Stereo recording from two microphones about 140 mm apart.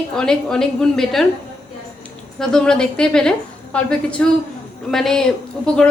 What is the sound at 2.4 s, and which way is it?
A woman's voice, 5° left (ahead or behind).